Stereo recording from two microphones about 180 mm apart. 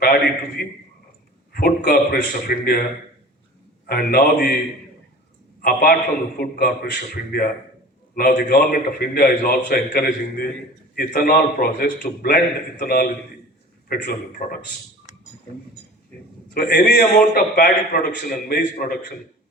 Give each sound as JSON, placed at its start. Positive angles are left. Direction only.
{"t": 0.0, "sound": "a sound", "side_deg": 55}
{"t": 1.5, "sound": "a man's voice", "side_deg": 55}
{"t": 3.8, "sound": "a man's voice", "side_deg": 60}
{"t": 5.6, "sound": "a man's voice", "side_deg": 55}
{"t": 16.6, "sound": "a man's voice", "side_deg": 55}